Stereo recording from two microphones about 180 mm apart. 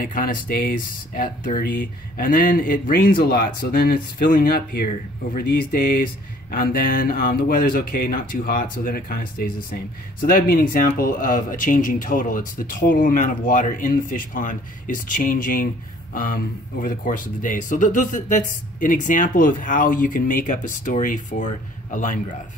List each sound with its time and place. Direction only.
0.0 s speech: 50° left (ahead or behind)